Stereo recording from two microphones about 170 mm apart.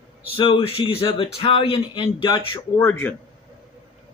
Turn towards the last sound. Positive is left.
turn(degrees=10)  # may be behind; listen again after turning